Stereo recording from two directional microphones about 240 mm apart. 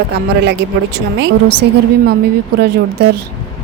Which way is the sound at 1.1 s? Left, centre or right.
Right.